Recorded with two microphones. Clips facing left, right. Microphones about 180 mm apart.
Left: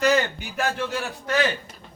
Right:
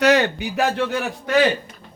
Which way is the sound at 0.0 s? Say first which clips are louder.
Right 4 dB; 75° right (ahead or behind).